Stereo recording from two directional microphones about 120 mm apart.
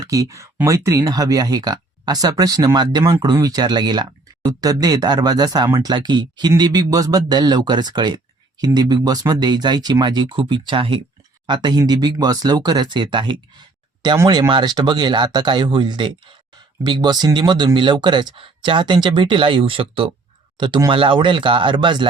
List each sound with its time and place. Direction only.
0.0 s speech: 30° right (ahead or behind)